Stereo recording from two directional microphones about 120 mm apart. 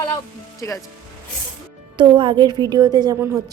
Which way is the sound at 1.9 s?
45° right (ahead or behind).